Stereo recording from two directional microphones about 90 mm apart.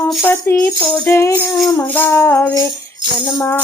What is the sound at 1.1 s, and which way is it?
Music, 30° left (ahead or behind).